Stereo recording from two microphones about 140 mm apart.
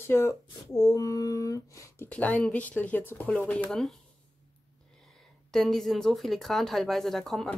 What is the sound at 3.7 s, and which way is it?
Speech, centre (ahead or behind).